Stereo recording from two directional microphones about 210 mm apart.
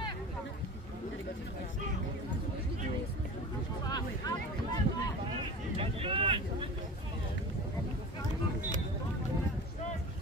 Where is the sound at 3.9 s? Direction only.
20° left (ahead or behind).